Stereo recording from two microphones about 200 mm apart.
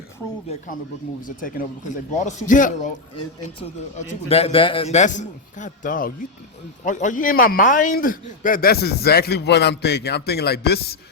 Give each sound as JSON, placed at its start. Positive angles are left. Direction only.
{"t": 1.4, "sound": "a man's voice", "side_deg": 45}
{"t": 3.9, "sound": "a man's voice", "side_deg": 30}